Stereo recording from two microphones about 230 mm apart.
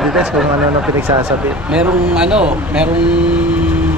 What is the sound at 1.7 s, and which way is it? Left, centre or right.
Speech, centre.